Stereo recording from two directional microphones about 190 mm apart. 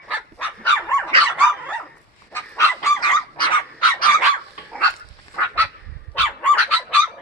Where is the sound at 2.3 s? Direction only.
10° left (ahead or behind).